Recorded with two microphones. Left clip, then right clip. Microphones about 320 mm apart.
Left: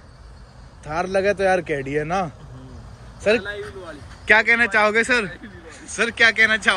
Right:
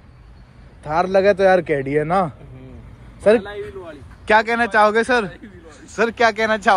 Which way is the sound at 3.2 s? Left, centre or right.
Centre.